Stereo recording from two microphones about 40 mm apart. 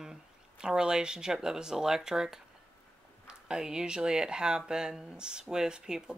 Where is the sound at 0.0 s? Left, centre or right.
Centre.